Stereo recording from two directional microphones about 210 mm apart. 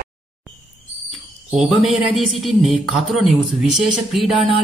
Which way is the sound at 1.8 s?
Centre (ahead or behind).